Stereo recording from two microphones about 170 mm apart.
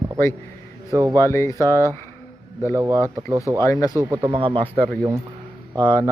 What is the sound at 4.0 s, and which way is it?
Speech, 25° right (ahead or behind).